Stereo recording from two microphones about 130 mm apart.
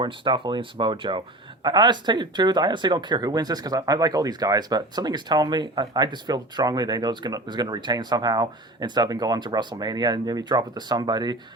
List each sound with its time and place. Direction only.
0.0 s speech: 40° right (ahead or behind)